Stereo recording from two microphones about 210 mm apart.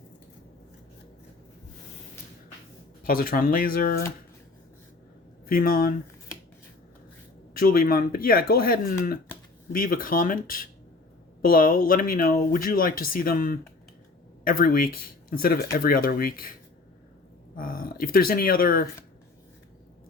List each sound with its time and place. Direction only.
3.0 s speech: 45° left (ahead or behind)
5.5 s speech: 45° left (ahead or behind)
7.5 s speech: 45° left (ahead or behind)
17.6 s speech: 40° left (ahead or behind)